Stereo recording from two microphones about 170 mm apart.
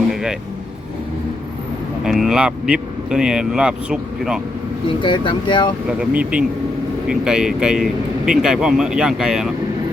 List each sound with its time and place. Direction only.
0.1 s vehicle: centre (ahead or behind)
2.0 s speech: centre (ahead or behind)
5.0 s speech: 30° left (ahead or behind)
6.0 s speech: 5° right (ahead or behind)